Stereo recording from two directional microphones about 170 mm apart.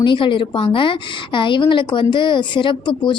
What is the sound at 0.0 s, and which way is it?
A woman's voice, 30° left (ahead or behind).